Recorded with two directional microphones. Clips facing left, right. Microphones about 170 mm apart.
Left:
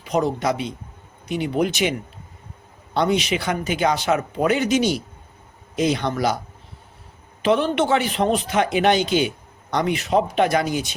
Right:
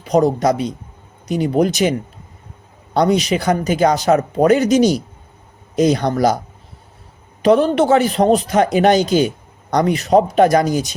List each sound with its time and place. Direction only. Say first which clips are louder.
0.0 s a man's voice: right 7 dB; 40° right (ahead or behind)
7.4 s a man's voice: right 6 dB; 40° right (ahead or behind)